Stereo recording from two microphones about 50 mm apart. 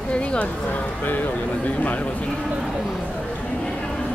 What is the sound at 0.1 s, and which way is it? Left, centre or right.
A man's voice, left.